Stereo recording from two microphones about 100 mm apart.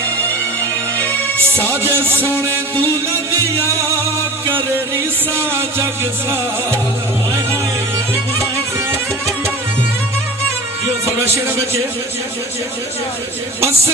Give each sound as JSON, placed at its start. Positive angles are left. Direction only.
{"t": 0.9, "sound": "music", "side_deg": 15}
{"t": 1.7, "sound": "speech", "side_deg": -25}
{"t": 5.5, "sound": "speech", "side_deg": -25}
{"t": 11.1, "sound": "speech", "side_deg": -25}